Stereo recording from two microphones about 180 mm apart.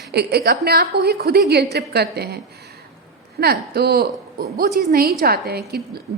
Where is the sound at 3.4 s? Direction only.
60° right (ahead or behind).